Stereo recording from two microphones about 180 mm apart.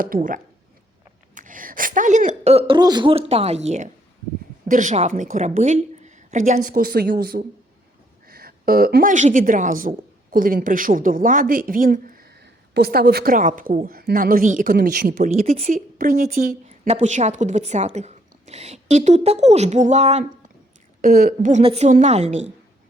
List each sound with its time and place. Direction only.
0.0 s a woman's voice: 50° right (ahead or behind)
16.6 s a woman's voice: 35° right (ahead or behind)
21.0 s speech: 50° right (ahead or behind)
21.6 s a woman's voice: 35° right (ahead or behind)